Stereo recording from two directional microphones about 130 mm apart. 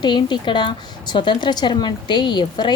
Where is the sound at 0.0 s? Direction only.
35° left (ahead or behind).